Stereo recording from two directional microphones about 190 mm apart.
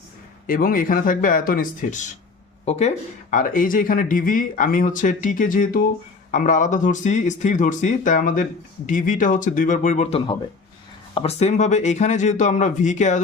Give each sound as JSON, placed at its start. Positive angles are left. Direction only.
{"t": 0.4, "sound": "speech", "side_deg": 50}